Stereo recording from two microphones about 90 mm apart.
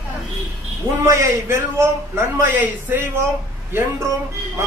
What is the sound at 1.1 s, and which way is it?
Speech, 30° right (ahead or behind).